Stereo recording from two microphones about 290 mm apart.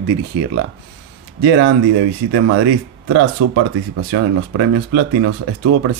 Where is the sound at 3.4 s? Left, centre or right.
Right.